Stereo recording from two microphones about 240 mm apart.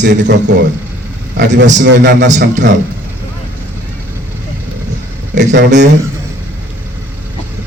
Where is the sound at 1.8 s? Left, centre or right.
Right.